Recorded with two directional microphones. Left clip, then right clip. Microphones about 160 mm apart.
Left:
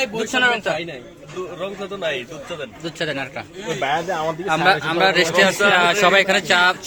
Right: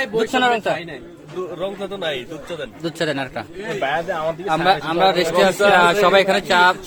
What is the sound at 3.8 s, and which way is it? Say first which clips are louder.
Speech: even; 55° left (ahead or behind).